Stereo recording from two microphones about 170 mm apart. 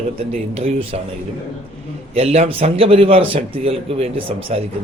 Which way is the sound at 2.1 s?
40° right (ahead or behind).